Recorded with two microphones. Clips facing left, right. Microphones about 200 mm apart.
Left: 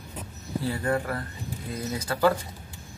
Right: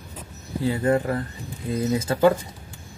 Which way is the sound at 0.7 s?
20° right (ahead or behind).